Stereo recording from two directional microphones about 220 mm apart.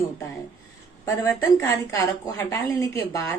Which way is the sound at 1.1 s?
10° left (ahead or behind).